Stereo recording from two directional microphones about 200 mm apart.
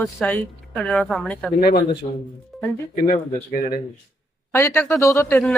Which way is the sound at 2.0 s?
30° left (ahead or behind).